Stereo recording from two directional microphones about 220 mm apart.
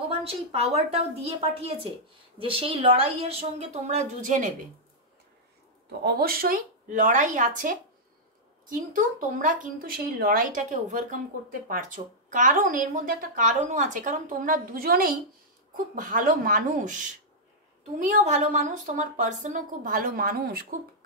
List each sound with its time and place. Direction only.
0.2 s a woman's voice: 25° right (ahead or behind)
5.9 s a woman's voice: 45° right (ahead or behind)